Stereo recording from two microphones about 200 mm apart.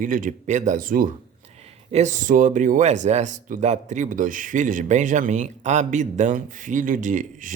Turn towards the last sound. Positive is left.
turn(degrees=-40)  # may be behind; listen again after turning